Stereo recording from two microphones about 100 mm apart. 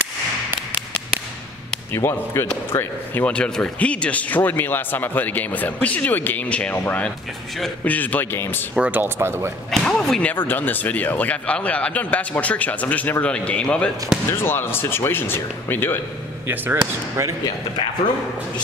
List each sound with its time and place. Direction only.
2.0 s speech: 25° left (ahead or behind)
8.7 s speech: 15° right (ahead or behind)
9.7 s speech: 5° left (ahead or behind)
10.3 s speech: 20° left (ahead or behind)
14.3 s speech: 25° left (ahead or behind)
16.4 s speech: 25° right (ahead or behind)